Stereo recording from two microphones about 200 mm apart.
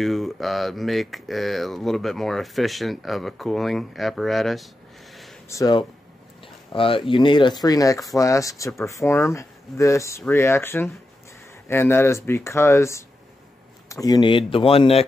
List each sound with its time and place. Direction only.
0.0 s speech: centre (ahead or behind)
5.5 s speech: 20° left (ahead or behind)